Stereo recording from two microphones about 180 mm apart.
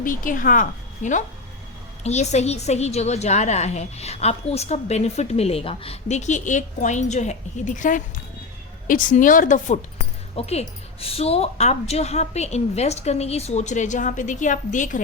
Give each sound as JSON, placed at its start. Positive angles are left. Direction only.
{"t": 0.0, "sound": "a woman's voice", "side_deg": 50}